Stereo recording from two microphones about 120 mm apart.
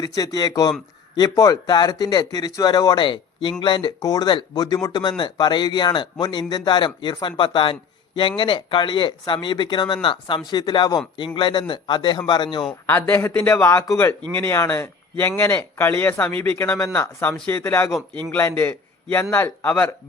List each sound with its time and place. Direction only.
0.0 s speech: 30° left (ahead or behind)
12.8 s speech: 15° left (ahead or behind)